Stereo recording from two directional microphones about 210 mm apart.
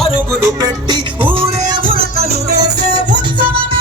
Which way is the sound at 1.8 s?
45° right (ahead or behind).